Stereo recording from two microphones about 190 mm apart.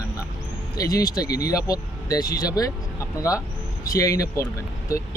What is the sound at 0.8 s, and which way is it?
Speech, 20° left (ahead or behind).